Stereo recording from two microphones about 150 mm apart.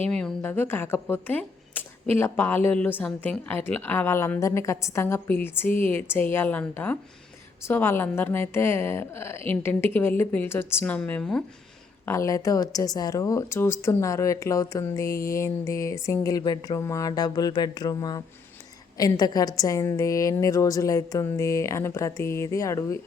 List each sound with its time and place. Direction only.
0.0 s speech: 5° left (ahead or behind)
12.0 s speech: 20° left (ahead or behind)